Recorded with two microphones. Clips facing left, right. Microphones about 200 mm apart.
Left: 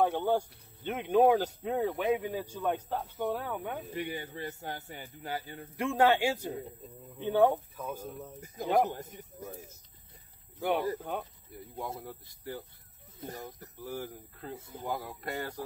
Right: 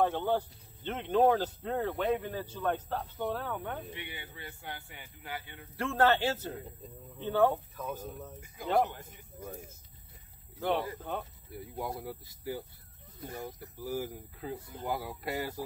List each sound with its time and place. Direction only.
0.0 s speech: 15° left (ahead or behind)
3.9 s speech: 40° left (ahead or behind)
5.8 s speech: 15° left (ahead or behind)
8.6 s speech: 40° left (ahead or behind)
9.4 s speech: 5° left (ahead or behind)
11.0 s speech: 10° left (ahead or behind)
11.5 s speech: 5° right (ahead or behind)